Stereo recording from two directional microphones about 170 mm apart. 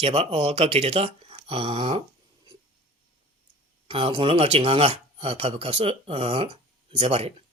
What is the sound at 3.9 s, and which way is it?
Speech, 35° right (ahead or behind).